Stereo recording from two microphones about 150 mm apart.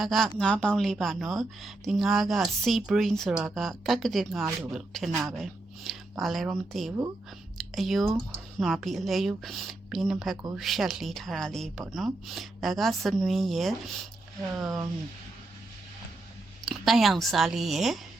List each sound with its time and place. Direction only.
0.0 s a woman's voice: centre (ahead or behind)
14.6 s speech: 20° right (ahead or behind)
16.6 s a woman's voice: centre (ahead or behind)